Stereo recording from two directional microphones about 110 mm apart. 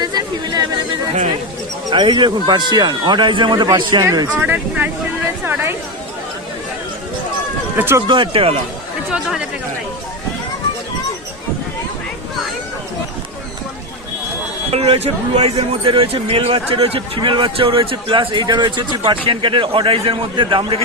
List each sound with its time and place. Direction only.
0.0 s a sound: 40° right (ahead or behind)
1.9 s a man's voice: 45° right (ahead or behind)
4.3 s speech: 15° right (ahead or behind)
7.8 s speech: 20° right (ahead or behind)
8.0 s a man's voice: 45° right (ahead or behind)
9.1 s speech: 5° right (ahead or behind)
14.7 s a man's voice: 65° right (ahead or behind); by 20.8 s 50° right (ahead or behind)